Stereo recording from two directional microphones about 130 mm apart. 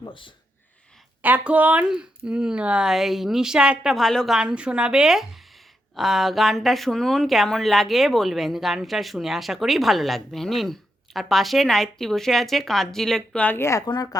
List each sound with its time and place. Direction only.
0.0 s speech: 40° left (ahead or behind)
1.2 s speech: 10° right (ahead or behind); by 14.2 s 30° left (ahead or behind)